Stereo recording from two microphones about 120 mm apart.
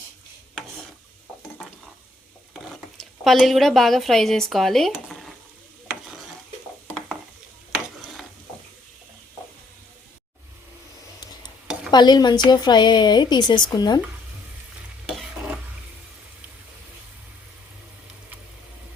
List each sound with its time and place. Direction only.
2.5 s speech: centre (ahead or behind)
11.9 s a woman's voice: 35° left (ahead or behind)
15.1 s stir: 5° right (ahead or behind)